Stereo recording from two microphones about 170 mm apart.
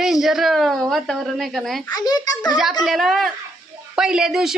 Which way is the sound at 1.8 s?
25° left (ahead or behind).